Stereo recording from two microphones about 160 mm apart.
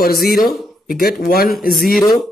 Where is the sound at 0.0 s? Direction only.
70° left (ahead or behind).